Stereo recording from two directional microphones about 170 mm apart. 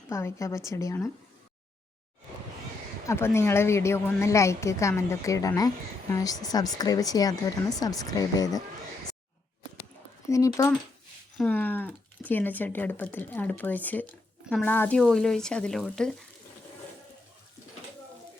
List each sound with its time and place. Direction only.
0.1 s speech: 15° left (ahead or behind)
3.1 s a woman's voice: 15° left (ahead or behind)
10.2 s speech: 20° left (ahead or behind); by 16.1 s 5° left (ahead or behind)